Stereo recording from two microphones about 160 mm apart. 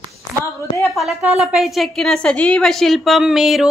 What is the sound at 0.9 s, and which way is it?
Speech, centre (ahead or behind).